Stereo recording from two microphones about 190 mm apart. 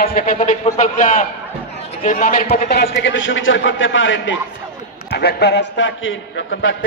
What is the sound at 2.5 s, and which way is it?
A man's voice, 55° left (ahead or behind).